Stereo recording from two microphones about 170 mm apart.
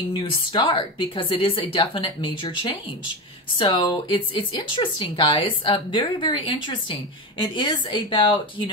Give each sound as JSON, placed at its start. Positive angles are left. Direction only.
{"t": 0.1, "sound": "a woman's voice", "side_deg": 30}